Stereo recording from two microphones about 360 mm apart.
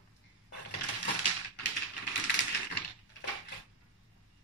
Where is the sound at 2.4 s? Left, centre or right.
Left.